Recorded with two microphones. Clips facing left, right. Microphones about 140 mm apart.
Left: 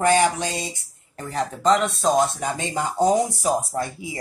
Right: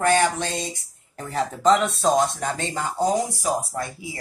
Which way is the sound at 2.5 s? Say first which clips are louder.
Left 2 dB; 15° left (ahead or behind).